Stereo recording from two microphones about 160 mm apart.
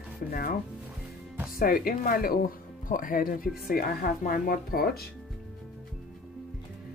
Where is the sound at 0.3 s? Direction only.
65° left (ahead or behind).